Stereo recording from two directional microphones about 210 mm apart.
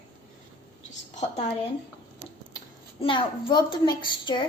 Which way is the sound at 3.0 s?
25° left (ahead or behind).